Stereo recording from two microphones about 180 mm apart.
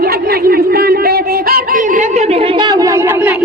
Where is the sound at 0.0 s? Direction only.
55° right (ahead or behind).